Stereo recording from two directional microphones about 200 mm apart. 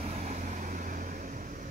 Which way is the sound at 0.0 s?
40° right (ahead or behind).